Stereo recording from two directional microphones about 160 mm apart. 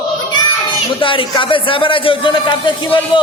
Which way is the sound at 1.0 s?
30° left (ahead or behind).